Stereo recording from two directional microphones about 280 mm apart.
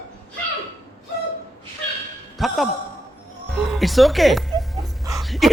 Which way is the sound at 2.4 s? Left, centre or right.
Centre.